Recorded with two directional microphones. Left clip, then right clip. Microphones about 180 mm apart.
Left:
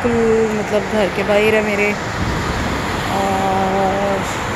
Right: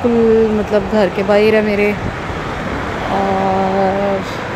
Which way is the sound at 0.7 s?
30° right (ahead or behind).